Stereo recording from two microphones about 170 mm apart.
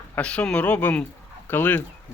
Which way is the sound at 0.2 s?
5° left (ahead or behind).